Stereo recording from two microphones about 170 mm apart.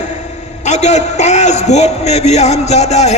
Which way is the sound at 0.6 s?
40° left (ahead or behind).